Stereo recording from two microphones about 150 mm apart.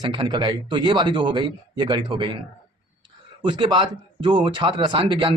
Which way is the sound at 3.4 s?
30° right (ahead or behind).